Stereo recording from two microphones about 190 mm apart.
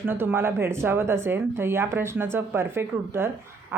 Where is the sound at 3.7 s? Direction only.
10° right (ahead or behind).